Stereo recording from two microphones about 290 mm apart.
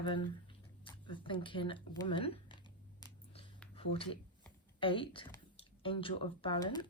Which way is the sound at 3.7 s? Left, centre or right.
Centre.